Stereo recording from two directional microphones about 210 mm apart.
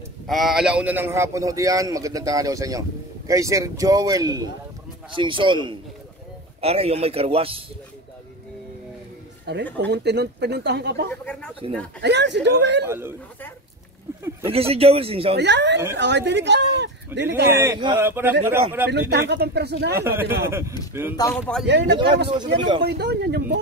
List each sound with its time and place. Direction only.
0.3 s a man's voice: centre (ahead or behind); by 7.6 s 25° right (ahead or behind)
9.8 s speech: 50° right (ahead or behind)
11.6 s a man's voice: 25° right (ahead or behind)
12.0 s speech: 55° right (ahead or behind)
12.8 s a man's voice: 10° right (ahead or behind)
14.4 s a man's voice: 25° right (ahead or behind)
15.3 s speech: 55° right (ahead or behind)
17.5 s a man's voice: 10° right (ahead or behind)
18.9 s speech: 50° right (ahead or behind)
20.0 s a man's voice: 10° right (ahead or behind)
21.2 s speech: 5° left (ahead or behind)
22.3 s a man's voice: 20° right (ahead or behind)
22.8 s speech: 50° right (ahead or behind)